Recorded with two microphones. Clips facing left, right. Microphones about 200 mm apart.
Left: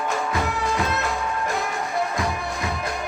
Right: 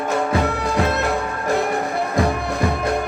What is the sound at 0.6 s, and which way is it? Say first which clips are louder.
Music: right 5 dB; 60° right (ahead or behind).